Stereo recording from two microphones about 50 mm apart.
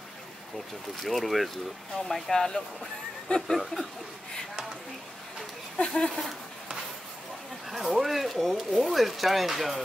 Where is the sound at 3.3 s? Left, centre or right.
Left.